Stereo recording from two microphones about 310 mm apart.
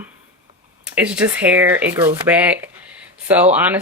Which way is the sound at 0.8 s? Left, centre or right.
Centre.